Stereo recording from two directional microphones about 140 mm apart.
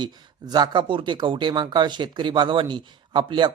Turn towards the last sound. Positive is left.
turn(degrees=-35)  # may be behind; listen again after turning